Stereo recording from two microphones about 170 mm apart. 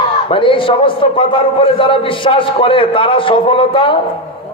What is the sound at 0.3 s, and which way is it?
A man's voice, 30° left (ahead or behind).